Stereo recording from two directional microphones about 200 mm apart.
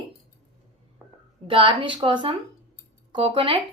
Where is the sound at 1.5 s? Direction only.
25° right (ahead or behind).